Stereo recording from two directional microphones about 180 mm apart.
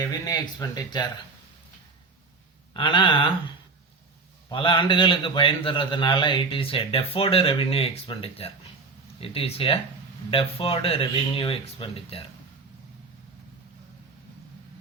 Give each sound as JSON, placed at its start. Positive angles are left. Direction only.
{"t": 0.0, "sound": "speech", "side_deg": 20}
{"t": 2.7, "sound": "a man's voice", "side_deg": 25}